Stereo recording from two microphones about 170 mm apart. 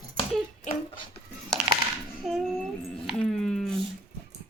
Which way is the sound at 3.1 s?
5° left (ahead or behind).